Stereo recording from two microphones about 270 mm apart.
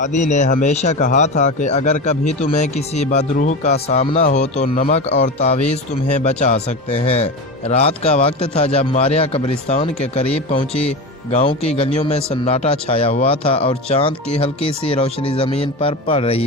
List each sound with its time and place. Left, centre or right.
0.0 s speech: left
11.3 s speech: left